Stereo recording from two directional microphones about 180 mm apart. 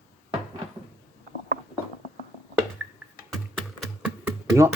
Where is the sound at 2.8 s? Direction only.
5° right (ahead or behind).